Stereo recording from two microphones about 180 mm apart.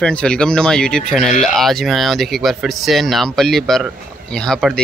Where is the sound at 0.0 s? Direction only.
5° left (ahead or behind).